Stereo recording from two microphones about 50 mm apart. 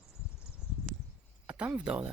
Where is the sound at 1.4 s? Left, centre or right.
Right.